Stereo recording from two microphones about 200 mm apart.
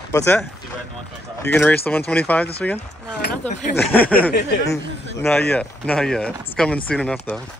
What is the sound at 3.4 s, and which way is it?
Speech, 35° left (ahead or behind).